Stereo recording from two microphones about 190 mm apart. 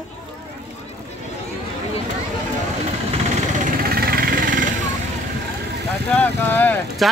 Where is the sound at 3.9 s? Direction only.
50° right (ahead or behind).